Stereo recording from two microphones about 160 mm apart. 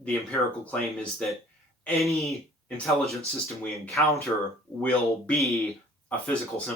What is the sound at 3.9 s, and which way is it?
Speech, 20° left (ahead or behind).